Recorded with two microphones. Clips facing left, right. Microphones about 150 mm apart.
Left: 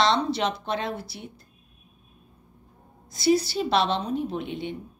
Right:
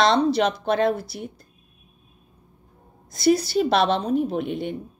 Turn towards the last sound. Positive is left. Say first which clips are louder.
# right 5 dB
turn(degrees=-50)  # may be behind; listen again after turning